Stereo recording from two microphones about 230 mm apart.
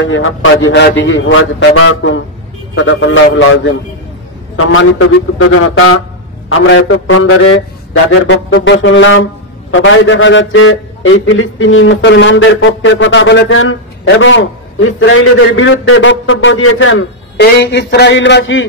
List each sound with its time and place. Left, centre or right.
0.0 s music: left
4.6 s a man's voice: left
6.6 s music: left